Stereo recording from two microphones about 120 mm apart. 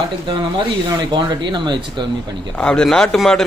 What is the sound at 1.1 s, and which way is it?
Speech, 40° right (ahead or behind).